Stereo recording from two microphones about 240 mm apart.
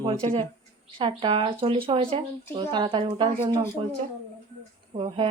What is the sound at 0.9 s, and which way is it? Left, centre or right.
A woman's voice, right.